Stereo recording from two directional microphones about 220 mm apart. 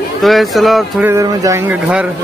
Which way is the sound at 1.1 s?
15° right (ahead or behind).